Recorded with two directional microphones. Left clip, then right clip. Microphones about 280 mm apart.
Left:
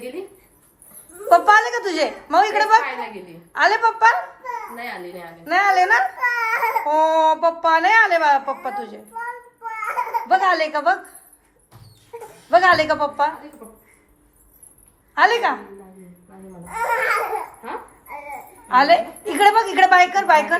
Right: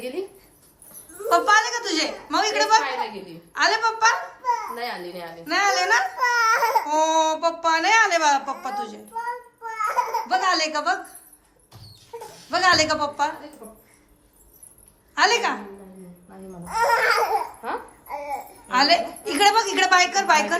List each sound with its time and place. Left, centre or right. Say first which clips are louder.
1.3 s a woman's voice: left 5 dB; centre
4.7 s speech: right 1 dB; centre
5.5 s a woman's voice: left 5 dB; centre
6.6 s speech: left 2 dB; centre
9.7 s crying: even; centre
12.5 s speech: left 4 dB; centre
15.1 s a woman's voice: left 3 dB; centre
16.7 s speech: right 1 dB; centre
18.7 s a woman's voice: left 4 dB; centre